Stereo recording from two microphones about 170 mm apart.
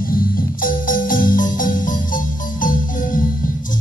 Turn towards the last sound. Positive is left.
turn(degrees=50)  # may be behind; listen again after turning